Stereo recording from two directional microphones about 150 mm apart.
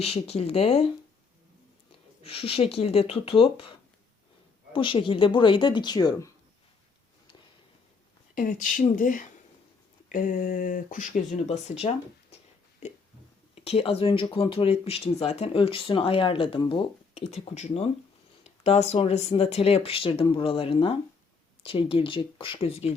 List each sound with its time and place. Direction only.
0.0 s speech: 40° left (ahead or behind)
1.9 s speech: 40° left (ahead or behind); by 6.3 s 25° left (ahead or behind)
8.4 s speech: 65° left (ahead or behind)
11.4 s speech: 45° left (ahead or behind)
13.6 s speech: 40° left (ahead or behind)
17.2 s speech: 45° left (ahead or behind)